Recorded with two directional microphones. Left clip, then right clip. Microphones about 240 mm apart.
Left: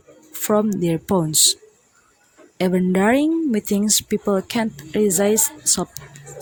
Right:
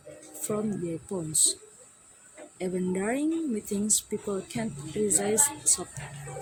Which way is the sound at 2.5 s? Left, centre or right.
Left.